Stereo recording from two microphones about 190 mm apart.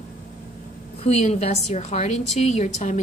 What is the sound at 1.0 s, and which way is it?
A woman's voice, 35° left (ahead or behind).